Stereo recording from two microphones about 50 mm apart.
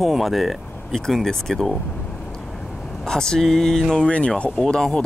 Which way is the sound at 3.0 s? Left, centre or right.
Centre.